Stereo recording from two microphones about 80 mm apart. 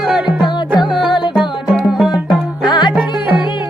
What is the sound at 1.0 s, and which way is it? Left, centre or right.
Music, left.